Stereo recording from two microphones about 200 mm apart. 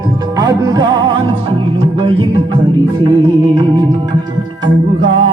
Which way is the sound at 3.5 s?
20° right (ahead or behind).